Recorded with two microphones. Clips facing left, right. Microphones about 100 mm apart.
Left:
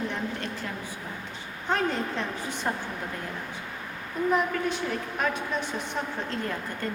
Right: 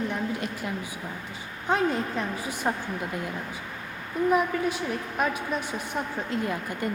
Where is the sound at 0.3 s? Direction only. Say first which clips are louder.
Right 2 dB; 10° right (ahead or behind).